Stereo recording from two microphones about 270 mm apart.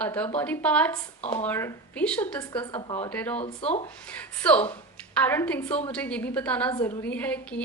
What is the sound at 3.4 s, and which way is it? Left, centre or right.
Speech, left.